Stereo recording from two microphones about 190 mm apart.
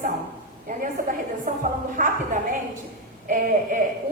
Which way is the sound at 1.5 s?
45° right (ahead or behind).